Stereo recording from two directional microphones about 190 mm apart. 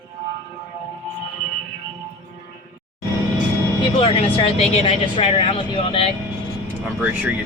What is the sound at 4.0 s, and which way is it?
Speech, 30° left (ahead or behind).